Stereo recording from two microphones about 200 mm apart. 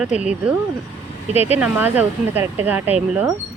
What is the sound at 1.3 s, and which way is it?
Speech, 30° left (ahead or behind).